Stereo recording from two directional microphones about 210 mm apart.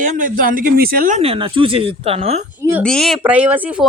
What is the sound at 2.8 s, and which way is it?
Speech, 5° left (ahead or behind).